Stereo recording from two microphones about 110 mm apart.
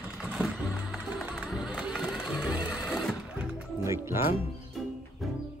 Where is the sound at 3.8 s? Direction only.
25° right (ahead or behind).